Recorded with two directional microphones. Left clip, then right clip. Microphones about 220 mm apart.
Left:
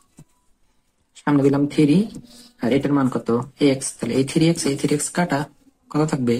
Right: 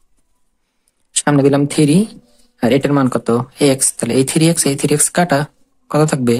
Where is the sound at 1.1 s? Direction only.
50° right (ahead or behind).